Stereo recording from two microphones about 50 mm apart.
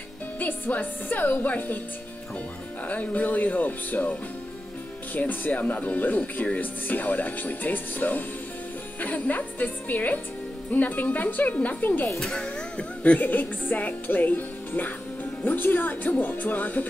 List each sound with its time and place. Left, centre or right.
0.4 s speech: left
2.9 s speech: left
12.2 s speech: centre
13.2 s speech: left